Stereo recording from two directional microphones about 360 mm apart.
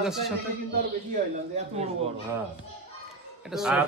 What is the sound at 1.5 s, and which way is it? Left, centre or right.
Speech, centre.